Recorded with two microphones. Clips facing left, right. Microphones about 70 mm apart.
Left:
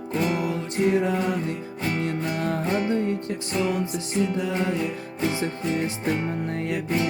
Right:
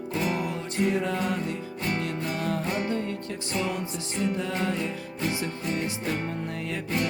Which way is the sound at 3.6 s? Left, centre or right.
Centre.